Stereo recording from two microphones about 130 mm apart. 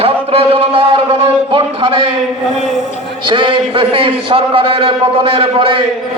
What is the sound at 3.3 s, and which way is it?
A man's voice, 40° right (ahead or behind).